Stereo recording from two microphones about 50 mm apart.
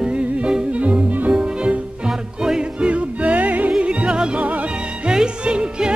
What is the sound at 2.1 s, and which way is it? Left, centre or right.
Music, centre.